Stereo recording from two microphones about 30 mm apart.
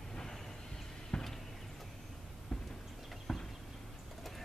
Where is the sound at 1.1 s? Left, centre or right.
Left.